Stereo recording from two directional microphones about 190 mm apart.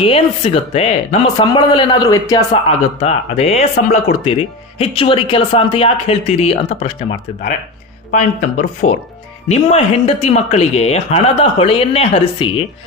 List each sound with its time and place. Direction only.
0.0 s speech: 30° left (ahead or behind)
1.4 s a man's voice: 20° left (ahead or behind)
8.1 s speech: 40° left (ahead or behind)